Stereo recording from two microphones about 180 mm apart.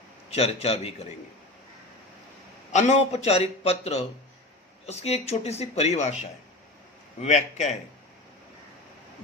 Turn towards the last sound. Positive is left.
turn(degrees=40)  # may be behind; listen again after turning